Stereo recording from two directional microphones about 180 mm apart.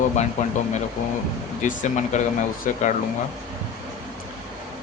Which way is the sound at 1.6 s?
45° left (ahead or behind).